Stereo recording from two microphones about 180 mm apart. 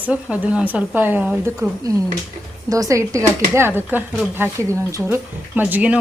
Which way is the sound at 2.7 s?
20° right (ahead or behind).